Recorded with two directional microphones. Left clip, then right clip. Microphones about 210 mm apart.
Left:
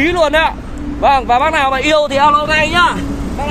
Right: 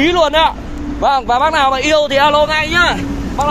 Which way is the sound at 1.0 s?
15° right (ahead or behind).